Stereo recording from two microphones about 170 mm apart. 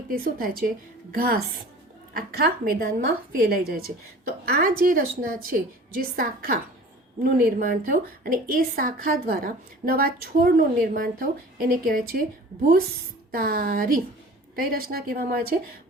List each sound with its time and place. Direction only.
0.1 s a woman's voice: 55° right (ahead or behind)
13.3 s a woman's voice: 60° right (ahead or behind)